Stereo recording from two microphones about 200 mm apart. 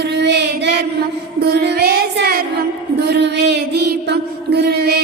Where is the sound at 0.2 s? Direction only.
55° right (ahead or behind).